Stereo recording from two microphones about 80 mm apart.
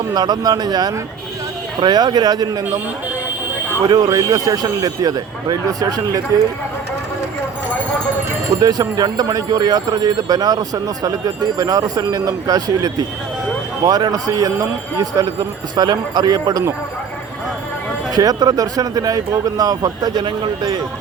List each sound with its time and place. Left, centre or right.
0.1 s a man's voice: right
1.8 s a man's voice: right
3.8 s a man's voice: right
8.6 s a man's voice: right
18.1 s a man's voice: right
20.2 s speech: right